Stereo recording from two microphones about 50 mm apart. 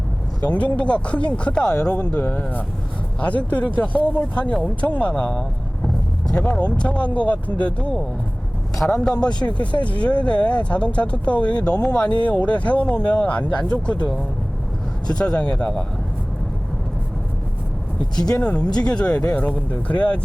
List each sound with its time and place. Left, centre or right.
0.4 s speech: left
5.3 s vehicle: centre
6.3 s speech: left
18.4 s speech: left